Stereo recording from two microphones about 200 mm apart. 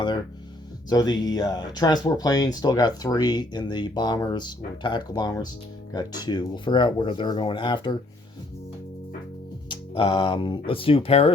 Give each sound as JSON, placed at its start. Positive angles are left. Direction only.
{"t": 0.9, "sound": "speech", "side_deg": 20}
{"t": 9.6, "sound": "speech", "side_deg": 25}